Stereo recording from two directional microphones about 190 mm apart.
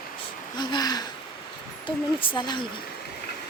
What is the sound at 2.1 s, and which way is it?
Speech, 25° left (ahead or behind).